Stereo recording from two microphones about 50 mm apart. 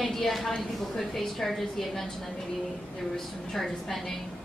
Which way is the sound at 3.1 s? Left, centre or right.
Centre.